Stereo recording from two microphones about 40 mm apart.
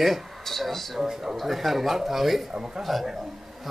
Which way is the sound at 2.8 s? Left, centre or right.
Centre.